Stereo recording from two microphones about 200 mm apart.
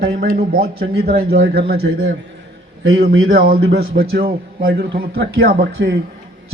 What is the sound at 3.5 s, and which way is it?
A man's voice, 45° right (ahead or behind).